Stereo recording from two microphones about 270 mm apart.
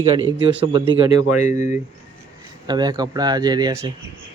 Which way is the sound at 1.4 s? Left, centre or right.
Left.